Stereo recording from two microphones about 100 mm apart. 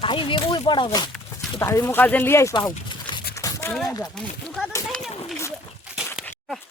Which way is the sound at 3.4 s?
30° left (ahead or behind).